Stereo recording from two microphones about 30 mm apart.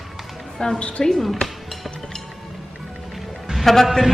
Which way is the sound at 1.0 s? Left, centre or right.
Centre.